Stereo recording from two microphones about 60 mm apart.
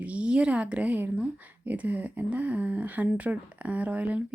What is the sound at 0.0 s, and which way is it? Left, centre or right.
A woman's voice, right.